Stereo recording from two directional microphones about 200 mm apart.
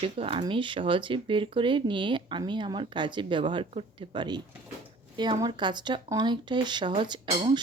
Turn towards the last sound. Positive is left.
turn(degrees=-20)  # may be behind; listen again after turning